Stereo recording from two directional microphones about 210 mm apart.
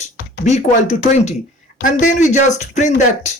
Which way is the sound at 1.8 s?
35° left (ahead or behind).